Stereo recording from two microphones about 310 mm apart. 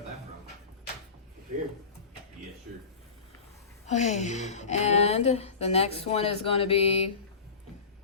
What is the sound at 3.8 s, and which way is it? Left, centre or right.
A woman's voice, left.